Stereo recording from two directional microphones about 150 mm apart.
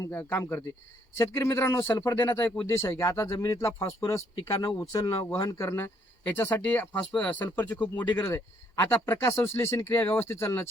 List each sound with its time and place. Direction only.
0.0 s speech: 15° left (ahead or behind)